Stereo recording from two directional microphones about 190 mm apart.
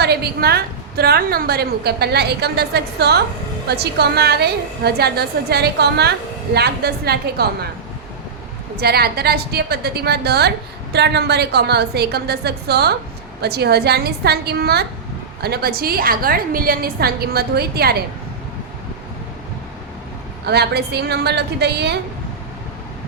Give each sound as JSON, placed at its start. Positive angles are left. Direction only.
{"t": 0.0, "sound": "a woman's voice", "side_deg": -55}
{"t": 8.7, "sound": "a woman's voice", "side_deg": -55}
{"t": 20.5, "sound": "a woman's voice", "side_deg": -60}